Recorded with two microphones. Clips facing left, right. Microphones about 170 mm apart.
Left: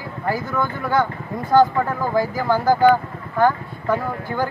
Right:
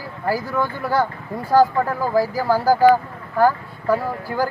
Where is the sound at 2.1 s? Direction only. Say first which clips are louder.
Right 1 dB; 35° right (ahead or behind).